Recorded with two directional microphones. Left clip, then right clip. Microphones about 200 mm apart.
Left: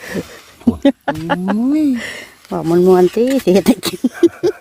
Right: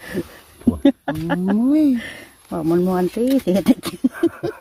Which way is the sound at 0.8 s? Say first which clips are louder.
Left 3 dB; 55° left (ahead or behind).